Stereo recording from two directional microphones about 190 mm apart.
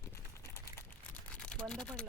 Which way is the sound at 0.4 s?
15° left (ahead or behind).